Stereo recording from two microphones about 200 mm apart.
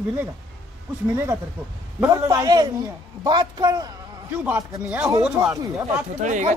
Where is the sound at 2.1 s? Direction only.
20° right (ahead or behind).